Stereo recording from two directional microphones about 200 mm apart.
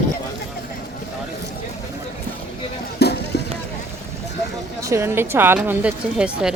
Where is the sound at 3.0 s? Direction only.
55° left (ahead or behind).